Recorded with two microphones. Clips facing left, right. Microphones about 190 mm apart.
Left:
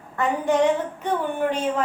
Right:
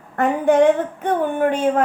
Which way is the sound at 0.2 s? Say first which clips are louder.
Right 5 dB; 55° right (ahead or behind).